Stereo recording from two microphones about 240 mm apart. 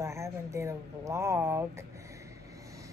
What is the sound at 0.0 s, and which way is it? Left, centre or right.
Speech, centre.